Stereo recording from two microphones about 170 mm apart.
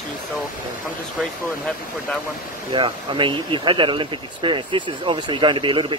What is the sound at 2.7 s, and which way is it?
Speech, 30° right (ahead or behind).